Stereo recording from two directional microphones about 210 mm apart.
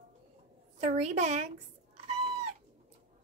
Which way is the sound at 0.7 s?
30° right (ahead or behind).